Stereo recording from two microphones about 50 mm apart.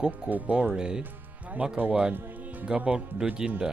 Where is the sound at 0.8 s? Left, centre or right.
Centre.